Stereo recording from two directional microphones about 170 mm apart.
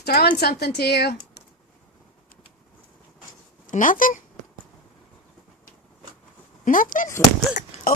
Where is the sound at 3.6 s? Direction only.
50° left (ahead or behind).